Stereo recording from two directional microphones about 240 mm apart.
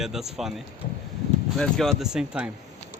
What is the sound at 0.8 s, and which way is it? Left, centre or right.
Speech, left.